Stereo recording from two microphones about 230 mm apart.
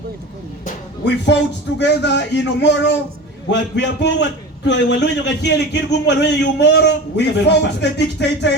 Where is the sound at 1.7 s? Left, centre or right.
Left.